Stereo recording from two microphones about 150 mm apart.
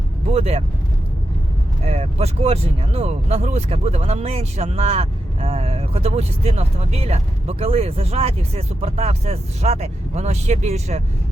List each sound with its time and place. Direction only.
0.3 s speech: 45° right (ahead or behind)
1.8 s speech: 40° right (ahead or behind)